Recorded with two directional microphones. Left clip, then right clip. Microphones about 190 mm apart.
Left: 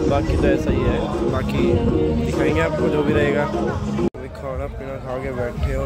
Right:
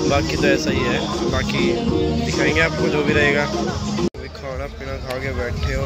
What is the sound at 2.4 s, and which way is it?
Speech, centre (ahead or behind).